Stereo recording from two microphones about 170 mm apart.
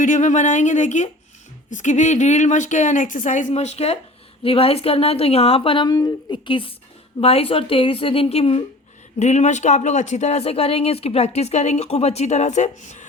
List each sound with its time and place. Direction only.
0.0 s speech: 50° left (ahead or behind)